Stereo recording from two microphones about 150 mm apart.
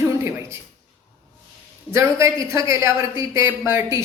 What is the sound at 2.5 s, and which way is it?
A man's voice, 20° right (ahead or behind).